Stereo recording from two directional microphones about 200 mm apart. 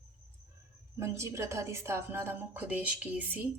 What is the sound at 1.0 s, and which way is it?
Speech, 15° right (ahead or behind).